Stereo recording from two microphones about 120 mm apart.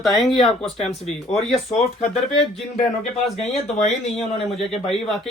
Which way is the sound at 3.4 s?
65° left (ahead or behind).